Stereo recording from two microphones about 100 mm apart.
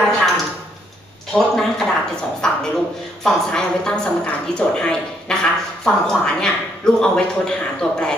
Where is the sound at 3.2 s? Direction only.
5° left (ahead or behind).